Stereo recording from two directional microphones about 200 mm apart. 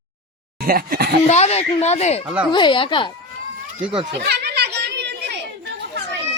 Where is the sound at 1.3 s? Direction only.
30° left (ahead or behind).